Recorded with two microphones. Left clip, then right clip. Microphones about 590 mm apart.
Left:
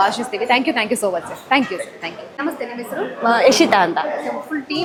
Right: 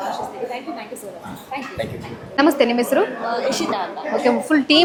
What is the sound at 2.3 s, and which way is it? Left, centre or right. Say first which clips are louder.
Speech: right 11 dB; right.